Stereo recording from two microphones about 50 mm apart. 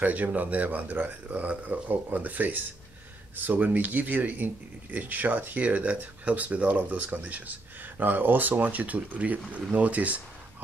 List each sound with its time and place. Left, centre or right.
0.0 s speech: right